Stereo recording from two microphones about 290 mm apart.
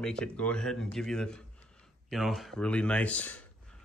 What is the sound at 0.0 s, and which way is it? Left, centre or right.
Speech, centre.